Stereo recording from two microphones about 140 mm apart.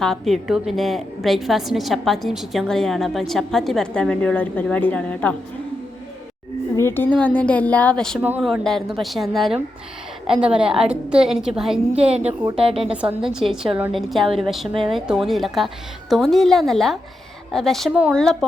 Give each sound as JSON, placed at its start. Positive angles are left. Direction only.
{"t": 0.0, "sound": "a woman's voice", "side_deg": 0}
{"t": 6.7, "sound": "a woman's voice", "side_deg": 15}
{"t": 12.0, "sound": "a woman's voice", "side_deg": -45}
{"t": 12.9, "sound": "a woman's voice", "side_deg": -10}